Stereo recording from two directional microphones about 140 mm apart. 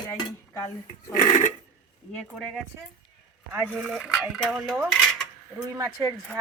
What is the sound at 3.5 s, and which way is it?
Speech, 15° right (ahead or behind).